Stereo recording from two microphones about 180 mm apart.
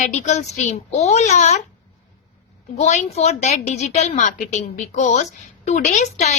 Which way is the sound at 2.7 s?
40° left (ahead or behind).